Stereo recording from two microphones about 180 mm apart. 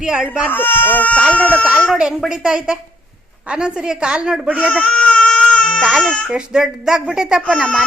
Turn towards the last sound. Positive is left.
turn(degrees=5)  # may be behind; listen again after turning